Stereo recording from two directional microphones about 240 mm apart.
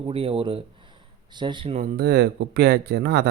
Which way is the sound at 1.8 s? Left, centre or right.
Right.